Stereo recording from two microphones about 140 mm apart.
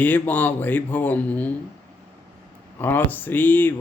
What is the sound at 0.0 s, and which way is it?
A man's voice, 15° left (ahead or behind).